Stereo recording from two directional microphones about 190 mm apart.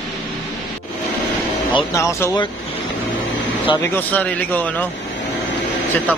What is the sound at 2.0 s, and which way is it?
Speech, 15° left (ahead or behind).